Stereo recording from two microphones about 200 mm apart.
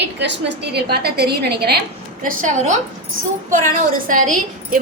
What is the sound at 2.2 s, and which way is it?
A woman's voice, 40° right (ahead or behind).